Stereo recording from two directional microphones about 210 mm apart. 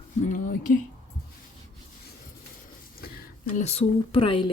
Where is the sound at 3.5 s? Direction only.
30° left (ahead or behind).